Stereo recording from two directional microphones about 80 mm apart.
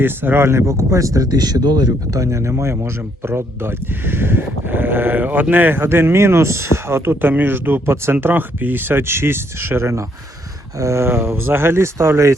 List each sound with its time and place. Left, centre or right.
0.0 s speech: right